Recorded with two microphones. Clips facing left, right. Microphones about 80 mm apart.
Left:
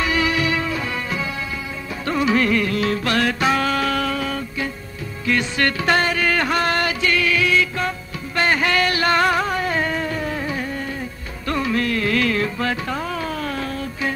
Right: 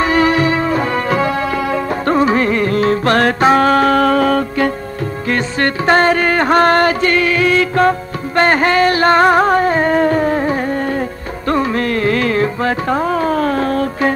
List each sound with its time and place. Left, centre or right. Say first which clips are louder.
0.0 s music: right 8 dB; right
2.0 s music: right 4 dB; right
5.3 s music: right 3 dB; right